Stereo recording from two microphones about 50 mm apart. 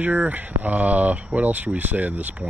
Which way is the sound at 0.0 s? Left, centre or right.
Right.